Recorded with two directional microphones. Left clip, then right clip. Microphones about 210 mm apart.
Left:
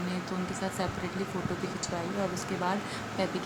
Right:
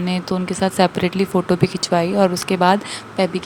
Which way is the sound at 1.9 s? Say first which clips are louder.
Right 18 dB; 45° right (ahead or behind).